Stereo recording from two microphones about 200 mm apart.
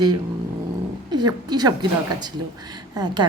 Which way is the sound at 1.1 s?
20° right (ahead or behind).